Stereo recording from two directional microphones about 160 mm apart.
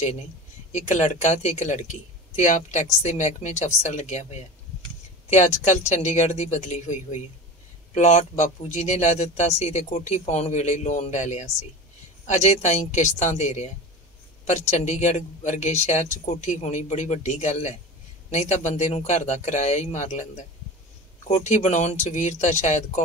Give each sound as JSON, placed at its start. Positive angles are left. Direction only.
{"t": 0.7, "sound": "speech", "side_deg": 45}